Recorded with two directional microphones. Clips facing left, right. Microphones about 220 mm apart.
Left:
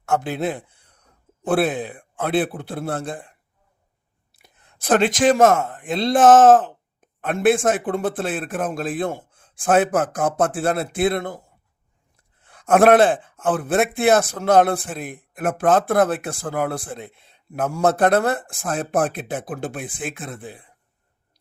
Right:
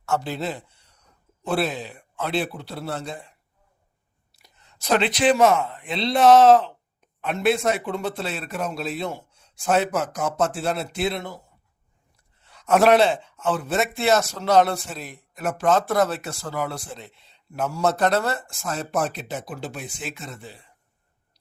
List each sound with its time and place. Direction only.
0.0 s a man's voice: 55° left (ahead or behind)
12.4 s a man's voice: 50° left (ahead or behind)